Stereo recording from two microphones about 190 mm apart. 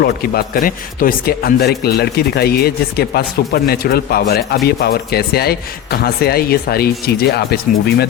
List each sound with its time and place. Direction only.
0.0 s a man's voice: 50° left (ahead or behind)